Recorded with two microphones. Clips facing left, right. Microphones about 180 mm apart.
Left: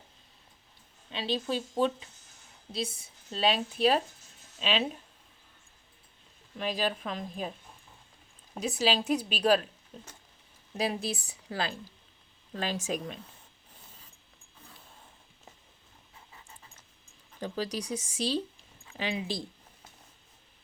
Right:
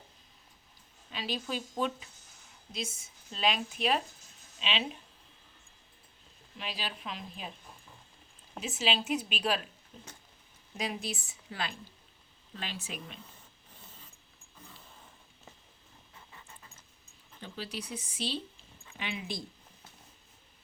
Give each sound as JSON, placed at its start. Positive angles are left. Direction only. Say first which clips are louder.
{"t": 1.1, "sound": "a woman's voice", "louder": "left 5 dB", "side_deg": 25}
{"t": 6.6, "sound": "speech", "louder": "left 9 dB", "side_deg": 45}
{"t": 8.5, "sound": "a woman's voice", "louder": "left 4 dB", "side_deg": 40}
{"t": 17.4, "sound": "a woman's voice", "louder": "left 7 dB", "side_deg": 40}